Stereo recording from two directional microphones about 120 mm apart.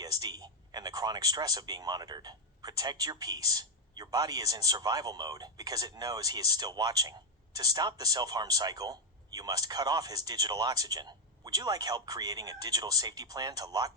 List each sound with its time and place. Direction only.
0.0 s speech: 35° right (ahead or behind)